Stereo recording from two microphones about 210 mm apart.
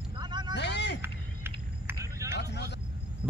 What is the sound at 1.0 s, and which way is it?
Vehicle, 10° right (ahead or behind).